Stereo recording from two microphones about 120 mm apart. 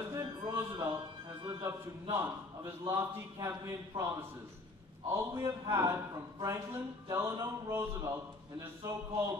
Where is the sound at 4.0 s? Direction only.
55° right (ahead or behind).